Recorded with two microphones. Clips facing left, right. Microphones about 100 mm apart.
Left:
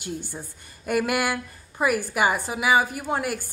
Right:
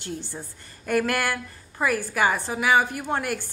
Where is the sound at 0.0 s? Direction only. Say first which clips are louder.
Left 1 dB; 15° left (ahead or behind).